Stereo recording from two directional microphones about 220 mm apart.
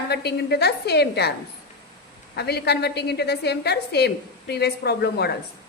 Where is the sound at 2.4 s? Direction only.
50° left (ahead or behind).